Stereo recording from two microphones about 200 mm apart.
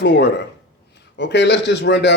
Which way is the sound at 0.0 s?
60° left (ahead or behind).